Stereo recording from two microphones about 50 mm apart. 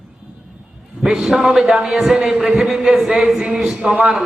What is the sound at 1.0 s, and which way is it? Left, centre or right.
A man's voice, centre.